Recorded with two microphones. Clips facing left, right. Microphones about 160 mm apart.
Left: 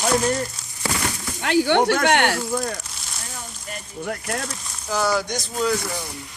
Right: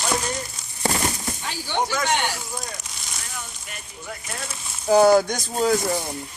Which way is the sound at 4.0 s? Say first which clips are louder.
Left 8 dB; 60° left (ahead or behind).